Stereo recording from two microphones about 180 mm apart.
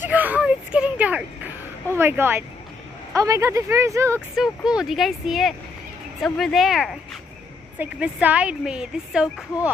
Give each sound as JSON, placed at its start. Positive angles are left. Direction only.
{"t": 0.0, "sound": "a sound", "side_deg": -10}
{"t": 2.0, "sound": "a woman's voice", "side_deg": -10}
{"t": 4.4, "sound": "a woman's voice", "side_deg": -5}